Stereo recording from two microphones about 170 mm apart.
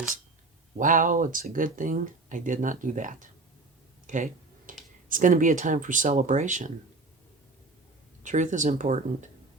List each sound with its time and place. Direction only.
0.8 s speech: 50° right (ahead or behind)
4.0 s a sound: 45° right (ahead or behind)
5.0 s speech: 50° right (ahead or behind)
8.2 s speech: 45° right (ahead or behind)